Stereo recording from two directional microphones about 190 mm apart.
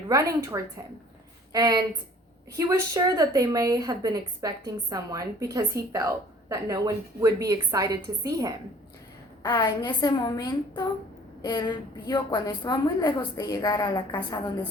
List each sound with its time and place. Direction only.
0.1 s a woman's voice: 15° right (ahead or behind)
9.4 s a woman's voice: 20° left (ahead or behind)